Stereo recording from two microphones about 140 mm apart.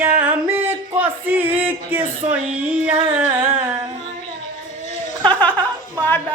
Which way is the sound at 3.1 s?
15° right (ahead or behind).